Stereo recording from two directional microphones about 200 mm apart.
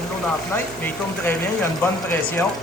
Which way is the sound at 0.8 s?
10° left (ahead or behind).